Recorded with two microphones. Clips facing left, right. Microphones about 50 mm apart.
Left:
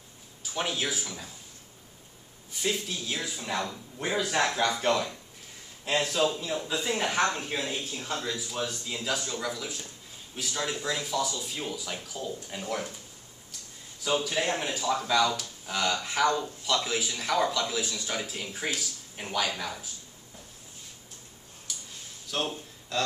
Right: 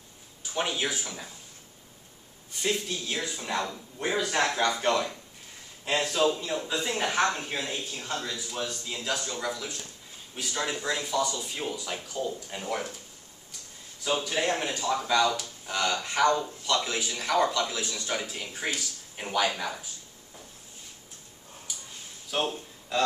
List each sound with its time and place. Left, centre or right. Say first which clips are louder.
0.4 s speech: right 2 dB; centre
2.5 s a man's voice: right 1 dB; centre
14.0 s a man's voice: even; centre
21.7 s a sound: left 1 dB; centre
22.3 s speech: right 2 dB; centre